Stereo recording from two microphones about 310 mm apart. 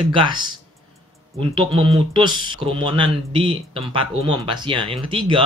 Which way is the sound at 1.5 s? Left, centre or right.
Centre.